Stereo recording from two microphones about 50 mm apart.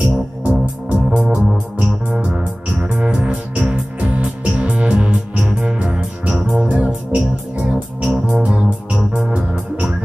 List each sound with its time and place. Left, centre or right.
0.0 s music: right